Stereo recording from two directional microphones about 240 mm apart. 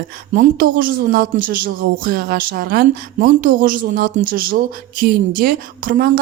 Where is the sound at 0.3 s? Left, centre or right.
Right.